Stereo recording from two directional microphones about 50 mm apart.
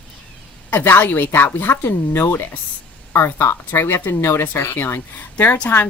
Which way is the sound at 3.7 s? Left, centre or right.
Left.